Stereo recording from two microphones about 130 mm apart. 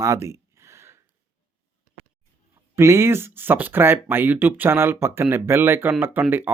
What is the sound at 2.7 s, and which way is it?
Speech, 20° right (ahead or behind).